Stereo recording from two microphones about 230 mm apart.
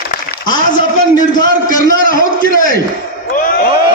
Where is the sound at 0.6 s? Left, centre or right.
Left.